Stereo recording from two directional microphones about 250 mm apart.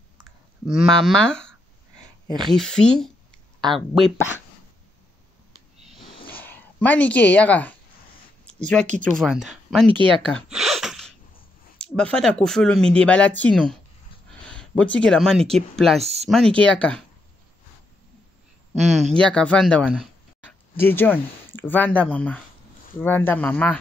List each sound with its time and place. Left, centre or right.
0.7 s speech: centre
2.2 s speech: centre
2.5 s speech: centre
6.3 s speech: centre
8.5 s a sound: centre
9.0 s speech: centre
9.8 s speech: right
10.1 s gasp: centre
11.8 s speech: centre
16.0 s speech: right
16.6 s speech: centre
18.8 s speech: right
19.0 s speech: centre
20.7 s speech: centre